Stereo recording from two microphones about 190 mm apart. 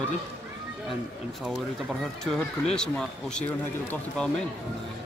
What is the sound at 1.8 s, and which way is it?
A man's voice, centre (ahead or behind).